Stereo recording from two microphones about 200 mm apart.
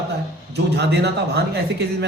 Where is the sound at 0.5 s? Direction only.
55° right (ahead or behind).